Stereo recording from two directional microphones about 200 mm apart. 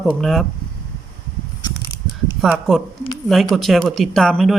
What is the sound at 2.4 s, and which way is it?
Speech, centre (ahead or behind).